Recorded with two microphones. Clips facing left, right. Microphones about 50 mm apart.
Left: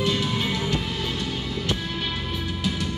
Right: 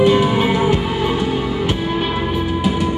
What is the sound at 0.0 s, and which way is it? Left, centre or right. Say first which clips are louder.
Music: right 11 dB; right.